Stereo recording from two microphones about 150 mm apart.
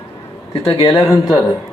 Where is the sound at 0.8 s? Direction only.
35° left (ahead or behind).